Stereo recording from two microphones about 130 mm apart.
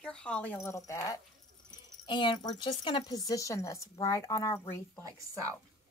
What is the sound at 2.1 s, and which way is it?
Speech, 35° left (ahead or behind).